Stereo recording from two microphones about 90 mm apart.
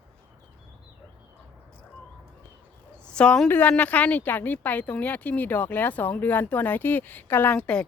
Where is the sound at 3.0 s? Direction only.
10° left (ahead or behind).